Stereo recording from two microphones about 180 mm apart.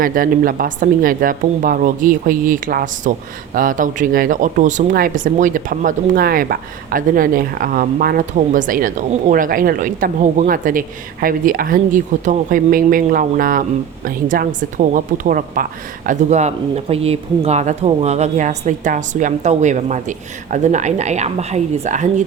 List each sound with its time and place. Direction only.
0.0 s a woman's voice: 50° right (ahead or behind)